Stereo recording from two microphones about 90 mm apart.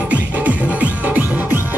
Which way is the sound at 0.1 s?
15° right (ahead or behind).